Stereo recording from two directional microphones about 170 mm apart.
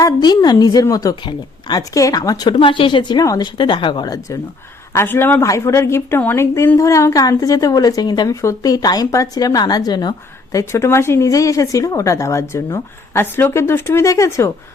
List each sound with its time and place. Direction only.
0.0 s speech: 25° left (ahead or behind)